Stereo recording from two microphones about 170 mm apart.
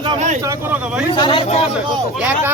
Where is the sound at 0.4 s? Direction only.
10° right (ahead or behind).